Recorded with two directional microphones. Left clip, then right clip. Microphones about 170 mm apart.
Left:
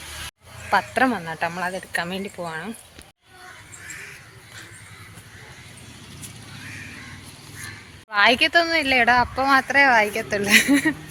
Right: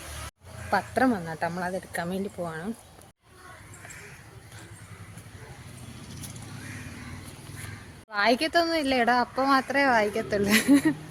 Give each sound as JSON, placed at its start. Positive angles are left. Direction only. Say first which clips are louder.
{"t": 0.9, "sound": "speech", "louder": "left 4 dB", "side_deg": -5}
{"t": 8.1, "sound": "speech", "louder": "left 7 dB", "side_deg": -5}